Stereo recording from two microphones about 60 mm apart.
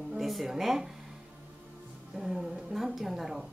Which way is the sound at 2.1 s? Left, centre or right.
Centre.